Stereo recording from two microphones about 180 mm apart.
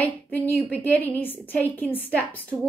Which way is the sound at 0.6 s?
10° left (ahead or behind).